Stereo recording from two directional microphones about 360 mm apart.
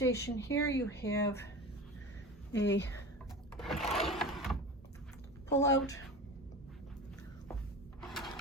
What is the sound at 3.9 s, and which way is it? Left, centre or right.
Sewing machine, centre.